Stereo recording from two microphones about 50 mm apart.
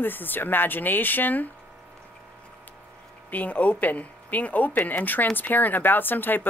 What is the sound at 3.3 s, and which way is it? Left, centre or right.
Speech, left.